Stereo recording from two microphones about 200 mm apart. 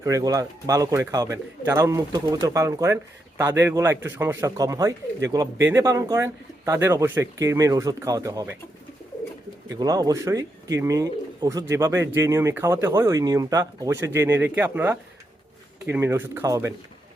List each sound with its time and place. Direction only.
0.0 s speech: 15° right (ahead or behind)
9.6 s speech: 20° right (ahead or behind)